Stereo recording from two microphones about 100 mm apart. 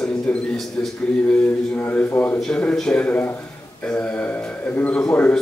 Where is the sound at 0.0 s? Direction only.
5° left (ahead or behind).